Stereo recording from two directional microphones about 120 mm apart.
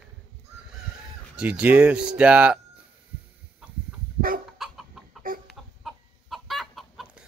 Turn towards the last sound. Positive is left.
turn(degrees=-5)  # may be behind; listen again after turning